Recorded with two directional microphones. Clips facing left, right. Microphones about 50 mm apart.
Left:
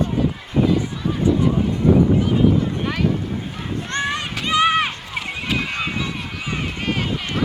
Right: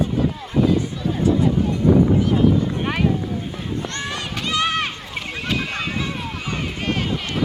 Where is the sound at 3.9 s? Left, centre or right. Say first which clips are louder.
Left 5 dB; left.